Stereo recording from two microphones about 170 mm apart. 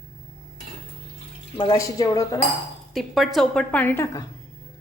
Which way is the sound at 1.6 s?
25° left (ahead or behind).